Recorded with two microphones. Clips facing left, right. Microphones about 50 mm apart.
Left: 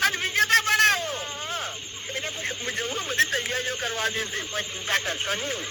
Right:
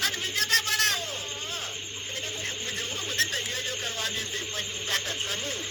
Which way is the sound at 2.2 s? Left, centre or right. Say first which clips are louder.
Left 4 dB; left.